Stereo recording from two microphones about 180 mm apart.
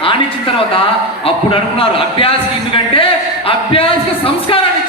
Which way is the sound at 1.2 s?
30° left (ahead or behind).